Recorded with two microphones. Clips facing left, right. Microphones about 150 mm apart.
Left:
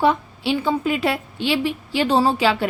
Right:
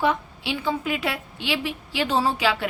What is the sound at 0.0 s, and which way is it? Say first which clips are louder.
A woman's voice: left 5 dB; 30° left (ahead or behind).